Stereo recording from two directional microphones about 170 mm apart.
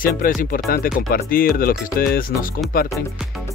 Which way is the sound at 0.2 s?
60° left (ahead or behind).